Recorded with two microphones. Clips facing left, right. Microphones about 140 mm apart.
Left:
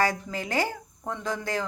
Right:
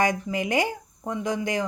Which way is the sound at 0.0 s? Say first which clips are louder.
Right 3 dB; 20° right (ahead or behind).